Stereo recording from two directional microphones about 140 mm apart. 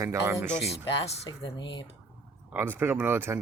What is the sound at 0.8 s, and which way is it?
Speech, 35° left (ahead or behind).